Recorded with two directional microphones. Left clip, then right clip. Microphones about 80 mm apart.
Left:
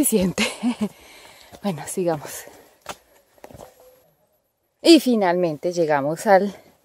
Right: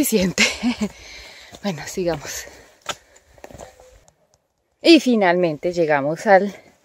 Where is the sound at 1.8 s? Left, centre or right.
Left.